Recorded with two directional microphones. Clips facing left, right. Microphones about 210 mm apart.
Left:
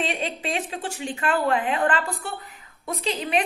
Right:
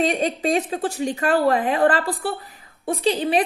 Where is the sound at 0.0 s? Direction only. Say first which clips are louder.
Right 7 dB; 40° right (ahead or behind).